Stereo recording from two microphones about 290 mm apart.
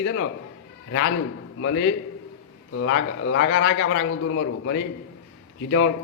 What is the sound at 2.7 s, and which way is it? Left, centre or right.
A man's voice, left.